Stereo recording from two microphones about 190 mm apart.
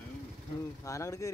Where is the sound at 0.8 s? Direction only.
15° left (ahead or behind).